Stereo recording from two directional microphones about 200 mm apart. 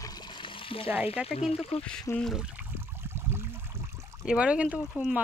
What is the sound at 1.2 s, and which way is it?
Speech, 30° left (ahead or behind).